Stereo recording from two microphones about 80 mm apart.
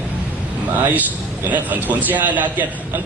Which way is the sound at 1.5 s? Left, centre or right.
Right.